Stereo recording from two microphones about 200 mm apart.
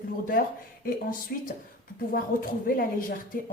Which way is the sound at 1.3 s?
50° left (ahead or behind).